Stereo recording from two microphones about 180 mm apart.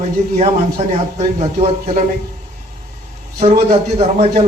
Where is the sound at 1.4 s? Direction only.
35° right (ahead or behind).